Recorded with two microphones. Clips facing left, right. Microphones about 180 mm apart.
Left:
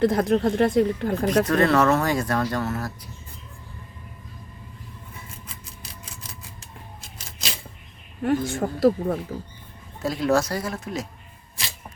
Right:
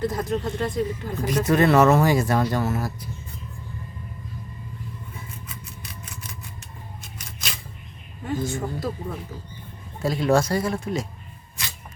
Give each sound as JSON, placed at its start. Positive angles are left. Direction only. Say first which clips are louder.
{"t": 0.0, "sound": "speech", "louder": "left 6 dB", "side_deg": 60}
{"t": 1.5, "sound": "speech", "louder": "right 5 dB", "side_deg": -10}
{"t": 8.2, "sound": "speech", "louder": "left 4 dB", "side_deg": 65}
{"t": 10.0, "sound": "speech", "louder": "right 1 dB", "side_deg": 0}